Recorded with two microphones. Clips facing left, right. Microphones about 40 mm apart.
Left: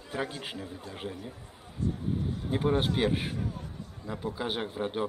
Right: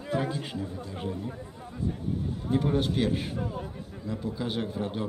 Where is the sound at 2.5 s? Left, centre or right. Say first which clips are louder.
Right 1 dB; left.